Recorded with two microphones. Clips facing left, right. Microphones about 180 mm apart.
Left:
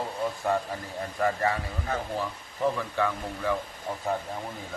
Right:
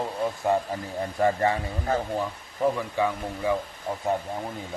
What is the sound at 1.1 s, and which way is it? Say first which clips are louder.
Speech: right 3 dB; 25° right (ahead or behind).